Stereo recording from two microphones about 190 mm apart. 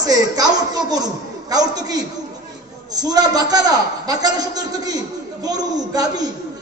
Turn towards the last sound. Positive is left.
turn(degrees=-20)  # may be behind; listen again after turning